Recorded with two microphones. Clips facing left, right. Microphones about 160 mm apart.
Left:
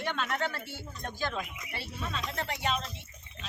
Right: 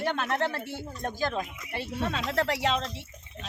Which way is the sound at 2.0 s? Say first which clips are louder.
Right 8 dB; 80° right.